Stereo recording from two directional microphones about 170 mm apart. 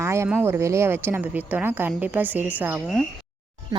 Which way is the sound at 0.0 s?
15° right (ahead or behind).